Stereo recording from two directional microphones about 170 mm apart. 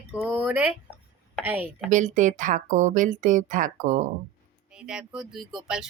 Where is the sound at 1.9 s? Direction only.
45° right (ahead or behind).